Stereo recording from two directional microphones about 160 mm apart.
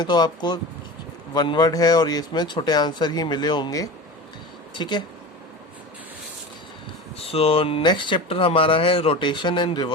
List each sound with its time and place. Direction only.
0.0 s speech: 25° left (ahead or behind)
7.2 s speech: 35° left (ahead or behind)